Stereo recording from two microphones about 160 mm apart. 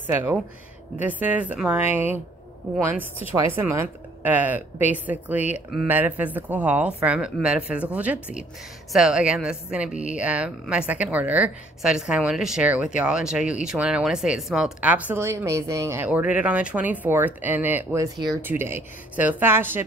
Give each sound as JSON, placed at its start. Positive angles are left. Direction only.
{"t": 0.1, "sound": "a woman's voice", "side_deg": -10}